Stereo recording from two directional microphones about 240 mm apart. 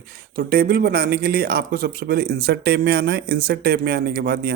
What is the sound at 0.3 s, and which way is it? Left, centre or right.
Speech, right.